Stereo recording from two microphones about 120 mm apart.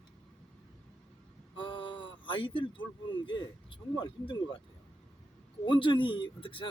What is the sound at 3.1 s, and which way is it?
Speech, 40° left (ahead or behind).